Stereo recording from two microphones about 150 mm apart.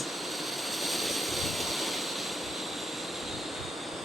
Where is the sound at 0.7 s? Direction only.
Centre (ahead or behind).